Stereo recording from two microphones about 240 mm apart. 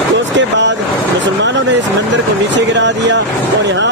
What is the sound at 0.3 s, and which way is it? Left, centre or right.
Vehicle, right.